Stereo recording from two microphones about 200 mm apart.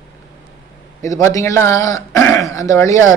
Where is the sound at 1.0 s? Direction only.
15° left (ahead or behind).